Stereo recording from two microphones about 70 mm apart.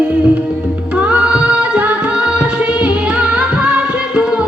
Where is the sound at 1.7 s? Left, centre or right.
Right.